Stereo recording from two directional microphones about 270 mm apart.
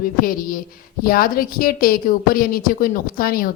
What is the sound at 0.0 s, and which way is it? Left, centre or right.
A woman's voice, left.